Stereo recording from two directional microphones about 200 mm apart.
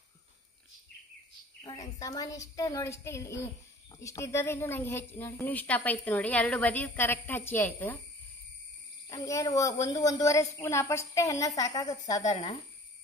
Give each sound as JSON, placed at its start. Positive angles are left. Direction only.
{"t": 1.6, "sound": "a woman's voice", "side_deg": 20}
{"t": 9.1, "sound": "a woman's voice", "side_deg": 15}